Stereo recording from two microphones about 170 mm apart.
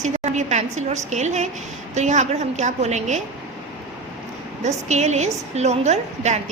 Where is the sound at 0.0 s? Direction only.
45° right (ahead or behind).